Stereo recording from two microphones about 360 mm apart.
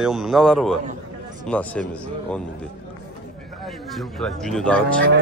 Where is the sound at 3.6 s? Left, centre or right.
Centre.